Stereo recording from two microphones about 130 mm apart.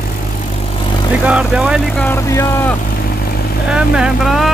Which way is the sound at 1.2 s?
5° right (ahead or behind).